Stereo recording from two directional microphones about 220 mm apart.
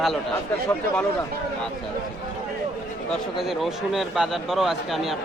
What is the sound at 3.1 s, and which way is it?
Speech, centre (ahead or behind).